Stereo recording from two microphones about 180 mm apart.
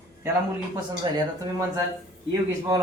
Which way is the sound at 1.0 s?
25° right (ahead or behind).